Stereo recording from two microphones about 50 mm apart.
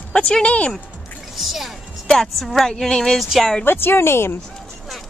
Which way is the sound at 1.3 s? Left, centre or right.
Centre.